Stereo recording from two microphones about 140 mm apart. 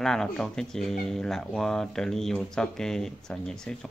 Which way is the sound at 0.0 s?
5° left (ahead or behind).